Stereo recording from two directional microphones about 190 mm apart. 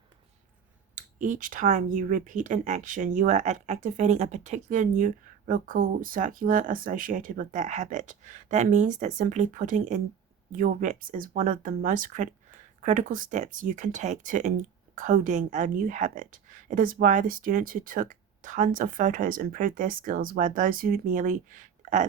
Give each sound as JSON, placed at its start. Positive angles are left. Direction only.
{"t": 0.9, "sound": "speech", "side_deg": -40}